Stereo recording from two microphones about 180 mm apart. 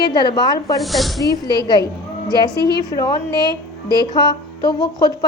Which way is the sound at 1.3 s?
25° left (ahead or behind).